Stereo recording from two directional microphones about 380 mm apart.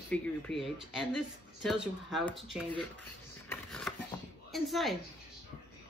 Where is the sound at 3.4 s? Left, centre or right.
Centre.